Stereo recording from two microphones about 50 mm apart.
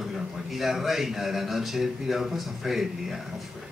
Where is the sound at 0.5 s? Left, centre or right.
Centre.